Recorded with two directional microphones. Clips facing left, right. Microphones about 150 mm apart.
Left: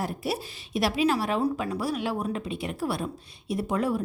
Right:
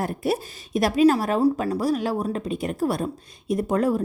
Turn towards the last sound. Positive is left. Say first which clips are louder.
# right 5 dB
turn(degrees=-40)  # may be behind; listen again after turning